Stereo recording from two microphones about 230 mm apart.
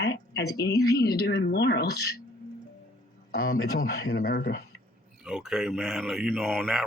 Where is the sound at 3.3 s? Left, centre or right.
Left.